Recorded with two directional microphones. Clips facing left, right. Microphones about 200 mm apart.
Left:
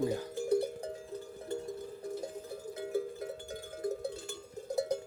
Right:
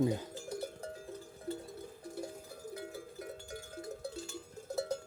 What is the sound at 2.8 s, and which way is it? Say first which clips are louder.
Cowbell: left 9 dB; 25° left (ahead or behind).